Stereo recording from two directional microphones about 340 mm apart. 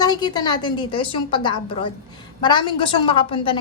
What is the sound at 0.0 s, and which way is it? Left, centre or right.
A woman's voice, centre.